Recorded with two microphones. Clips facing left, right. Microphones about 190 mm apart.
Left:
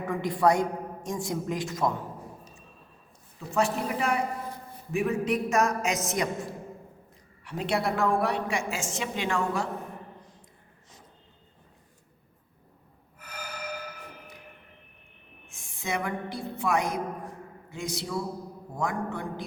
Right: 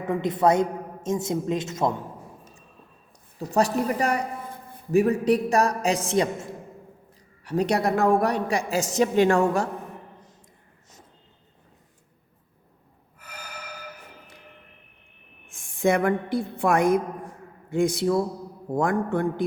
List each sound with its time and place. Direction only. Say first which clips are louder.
0.0 s a woman's voice: right 3 dB; 20° right (ahead or behind)
3.3 s a woman's voice: right 5 dB; 40° right (ahead or behind)
7.4 s a woman's voice: right 5 dB; 40° right (ahead or behind)
15.5 s a woman's voice: right 10 dB; 55° right (ahead or behind)